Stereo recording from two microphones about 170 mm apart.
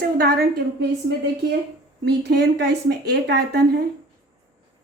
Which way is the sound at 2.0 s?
80° right.